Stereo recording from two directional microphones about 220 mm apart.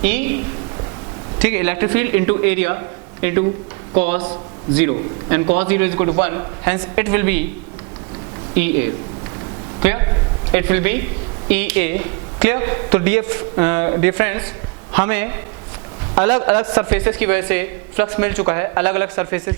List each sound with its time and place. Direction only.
0.0 s a man's voice: 10° right (ahead or behind)
1.4 s a man's voice: 10° right (ahead or behind)
4.9 s a man's voice: 25° right (ahead or behind)
10.5 s a man's voice: 15° right (ahead or behind)